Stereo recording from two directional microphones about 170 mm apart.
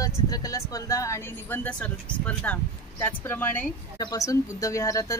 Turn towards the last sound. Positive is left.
turn(degrees=20)  # may be behind; listen again after turning